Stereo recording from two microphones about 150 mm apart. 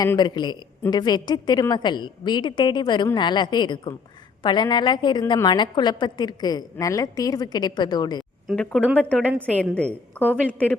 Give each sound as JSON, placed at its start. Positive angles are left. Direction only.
{"t": 0.0, "sound": "a woman's voice", "side_deg": 25}
{"t": 8.4, "sound": "a woman's voice", "side_deg": 5}